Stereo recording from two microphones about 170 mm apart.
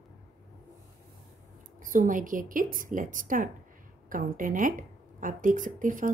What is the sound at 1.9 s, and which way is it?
A woman's voice, 50° right (ahead or behind).